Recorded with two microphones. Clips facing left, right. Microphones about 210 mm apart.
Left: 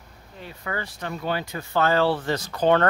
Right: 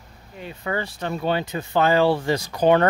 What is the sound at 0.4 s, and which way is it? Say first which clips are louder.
Speech: right 5 dB; 25° right (ahead or behind).